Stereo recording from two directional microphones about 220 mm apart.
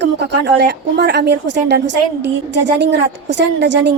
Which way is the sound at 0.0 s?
50° right (ahead or behind).